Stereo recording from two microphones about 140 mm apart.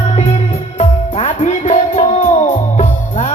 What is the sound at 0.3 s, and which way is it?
Music, 45° left (ahead or behind).